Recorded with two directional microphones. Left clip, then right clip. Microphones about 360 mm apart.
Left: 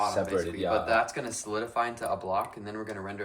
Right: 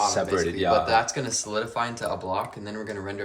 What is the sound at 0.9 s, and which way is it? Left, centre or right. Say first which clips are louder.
Speech: right 4 dB; centre.